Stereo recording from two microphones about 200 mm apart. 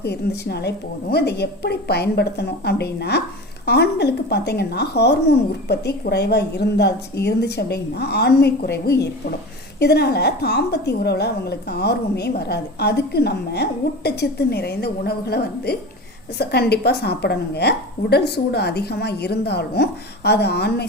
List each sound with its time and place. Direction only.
0.0 s a woman's voice: 55° left (ahead or behind)